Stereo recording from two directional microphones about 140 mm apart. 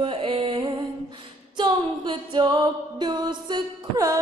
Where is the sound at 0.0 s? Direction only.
40° right (ahead or behind).